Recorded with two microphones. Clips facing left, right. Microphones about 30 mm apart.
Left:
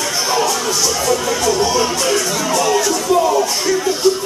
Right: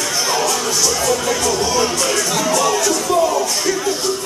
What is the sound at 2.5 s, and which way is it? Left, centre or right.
Music, centre.